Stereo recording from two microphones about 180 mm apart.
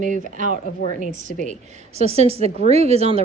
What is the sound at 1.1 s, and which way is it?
A woman's voice, 45° right (ahead or behind).